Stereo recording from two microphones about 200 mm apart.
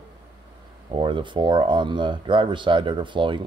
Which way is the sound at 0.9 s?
25° right (ahead or behind).